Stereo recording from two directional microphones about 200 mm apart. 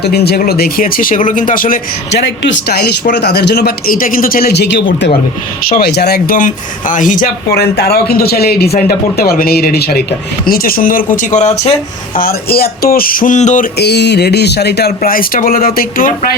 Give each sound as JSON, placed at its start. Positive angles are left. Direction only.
{"t": 0.0, "sound": "speech", "side_deg": 55}
{"t": 7.8, "sound": "speech", "side_deg": 50}
{"t": 12.1, "sound": "speech", "side_deg": 50}
{"t": 13.7, "sound": "speech", "side_deg": 55}